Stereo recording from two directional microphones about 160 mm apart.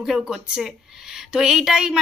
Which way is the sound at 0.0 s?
Centre (ahead or behind).